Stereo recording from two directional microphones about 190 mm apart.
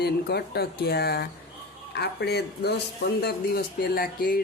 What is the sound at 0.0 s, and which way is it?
Speech, 60° left (ahead or behind).